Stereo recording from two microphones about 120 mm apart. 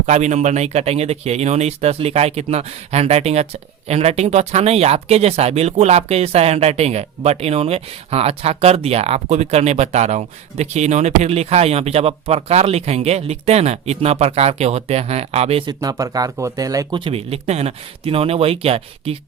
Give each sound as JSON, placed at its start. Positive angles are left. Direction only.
{"t": 0.0, "sound": "speech", "side_deg": -75}
{"t": 15.6, "sound": "speech", "side_deg": -30}
{"t": 17.0, "sound": "speech", "side_deg": -55}